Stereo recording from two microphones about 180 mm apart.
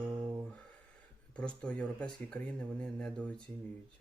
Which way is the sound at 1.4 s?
5° left (ahead or behind).